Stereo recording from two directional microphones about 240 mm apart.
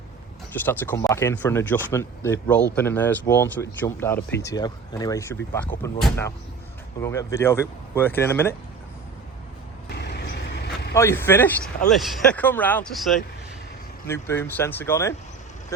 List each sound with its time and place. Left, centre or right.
0.5 s speech: centre
9.9 s vehicle: left
10.9 s speech: centre